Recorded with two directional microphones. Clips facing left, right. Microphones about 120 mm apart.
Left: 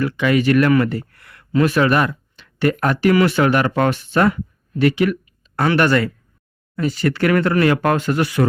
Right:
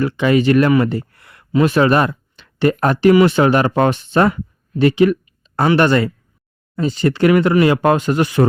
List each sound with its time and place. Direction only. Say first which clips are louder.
0.0 s speech: right 2 dB; 30° right (ahead or behind)